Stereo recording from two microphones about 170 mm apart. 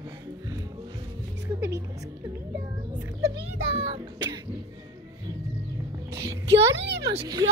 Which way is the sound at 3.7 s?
35° right (ahead or behind).